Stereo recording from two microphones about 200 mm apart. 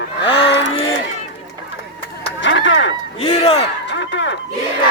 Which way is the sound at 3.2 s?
30° left (ahead or behind).